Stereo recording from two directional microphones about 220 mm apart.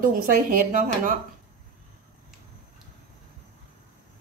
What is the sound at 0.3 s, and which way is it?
Speech, 40° right (ahead or behind).